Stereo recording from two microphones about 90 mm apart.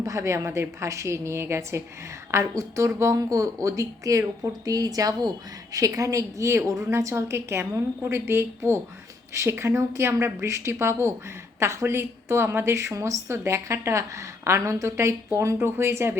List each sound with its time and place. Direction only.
0.0 s a woman's voice: 35° right (ahead or behind)